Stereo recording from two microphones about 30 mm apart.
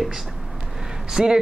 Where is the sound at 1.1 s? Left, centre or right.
Centre.